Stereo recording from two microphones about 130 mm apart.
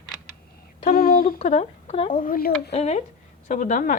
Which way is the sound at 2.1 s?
90° left.